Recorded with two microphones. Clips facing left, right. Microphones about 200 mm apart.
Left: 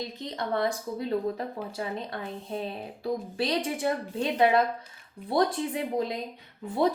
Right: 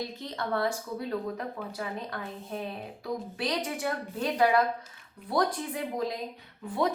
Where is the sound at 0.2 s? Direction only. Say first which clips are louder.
Left 3 dB; 20° left (ahead or behind).